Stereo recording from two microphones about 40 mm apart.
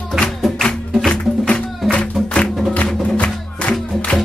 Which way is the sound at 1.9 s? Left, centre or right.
Left.